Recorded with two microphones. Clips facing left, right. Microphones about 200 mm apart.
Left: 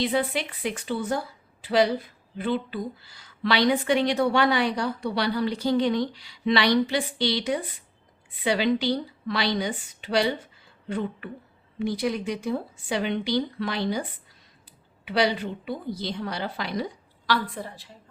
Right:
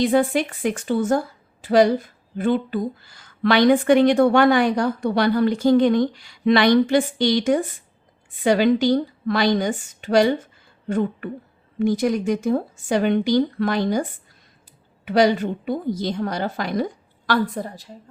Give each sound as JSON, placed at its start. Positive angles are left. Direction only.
{"t": 0.0, "sound": "a woman's voice", "side_deg": -45}